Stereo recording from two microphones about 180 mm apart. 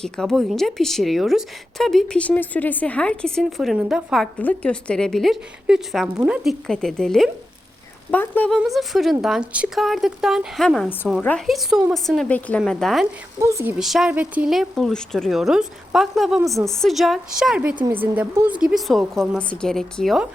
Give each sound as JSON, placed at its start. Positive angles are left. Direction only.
{"t": 0.0, "sound": "a woman's voice", "side_deg": 0}
{"t": 13.4, "sound": "speech", "side_deg": -15}
{"t": 13.7, "sound": "a woman's voice", "side_deg": 0}
{"t": 17.7, "sound": "a woman's voice", "side_deg": -25}
{"t": 18.0, "sound": "a woman's voice", "side_deg": -10}